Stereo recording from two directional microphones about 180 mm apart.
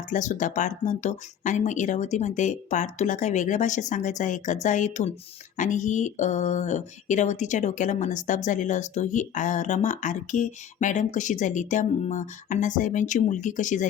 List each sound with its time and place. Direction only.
0.1 s speech: 45° left (ahead or behind)